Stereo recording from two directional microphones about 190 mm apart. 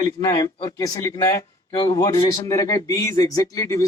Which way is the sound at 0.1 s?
20° left (ahead or behind).